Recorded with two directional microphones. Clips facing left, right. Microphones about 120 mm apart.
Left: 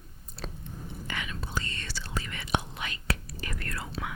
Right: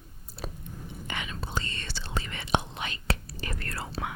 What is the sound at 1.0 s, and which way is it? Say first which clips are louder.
Whispering: right 1 dB; 25° right (ahead or behind).